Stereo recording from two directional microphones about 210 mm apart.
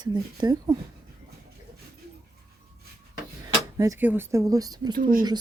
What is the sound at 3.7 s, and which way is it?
Speech, 15° right (ahead or behind).